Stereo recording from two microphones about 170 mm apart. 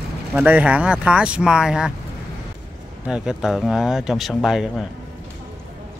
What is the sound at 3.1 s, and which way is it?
Speech, 5° right (ahead or behind).